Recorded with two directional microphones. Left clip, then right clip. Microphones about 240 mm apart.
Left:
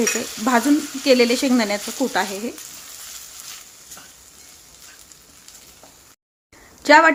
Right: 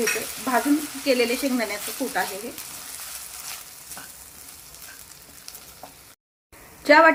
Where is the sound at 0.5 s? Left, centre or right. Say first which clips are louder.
Left 4 dB; left.